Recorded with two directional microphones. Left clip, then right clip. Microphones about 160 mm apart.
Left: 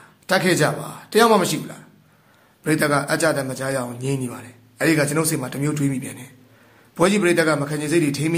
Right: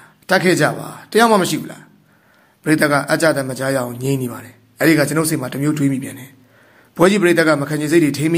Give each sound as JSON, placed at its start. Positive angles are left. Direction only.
{"t": 0.3, "sound": "a man's voice", "side_deg": -20}